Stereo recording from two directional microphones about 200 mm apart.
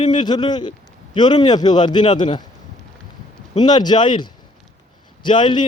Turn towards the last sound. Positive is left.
turn(degrees=25)  # may be behind; listen again after turning